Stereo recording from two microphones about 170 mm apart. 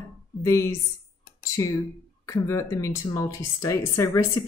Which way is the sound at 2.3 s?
20° left (ahead or behind).